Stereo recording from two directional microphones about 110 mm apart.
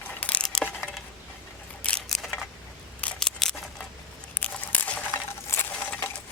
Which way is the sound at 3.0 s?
5° left (ahead or behind).